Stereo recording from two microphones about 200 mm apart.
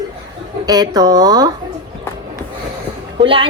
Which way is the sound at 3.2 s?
25° right (ahead or behind).